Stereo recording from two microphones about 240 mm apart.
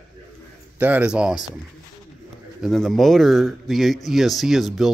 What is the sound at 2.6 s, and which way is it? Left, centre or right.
Speech, centre.